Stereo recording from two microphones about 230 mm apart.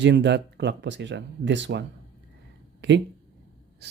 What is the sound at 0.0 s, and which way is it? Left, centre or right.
Speech, right.